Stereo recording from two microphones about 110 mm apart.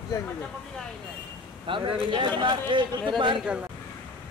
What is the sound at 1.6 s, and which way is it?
Speech, 50° right (ahead or behind).